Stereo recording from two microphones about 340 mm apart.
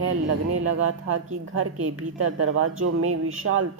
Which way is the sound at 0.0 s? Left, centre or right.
Right.